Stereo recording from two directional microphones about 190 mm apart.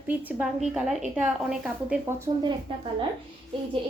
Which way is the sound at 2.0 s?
25° right (ahead or behind).